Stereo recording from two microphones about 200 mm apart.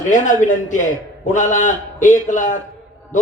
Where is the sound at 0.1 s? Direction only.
40° left (ahead or behind).